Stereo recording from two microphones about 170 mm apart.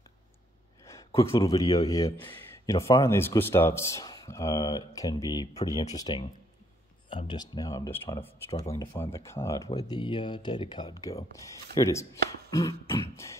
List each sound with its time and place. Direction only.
0.8 s speech: 15° left (ahead or behind)
9.8 s speech: 25° left (ahead or behind)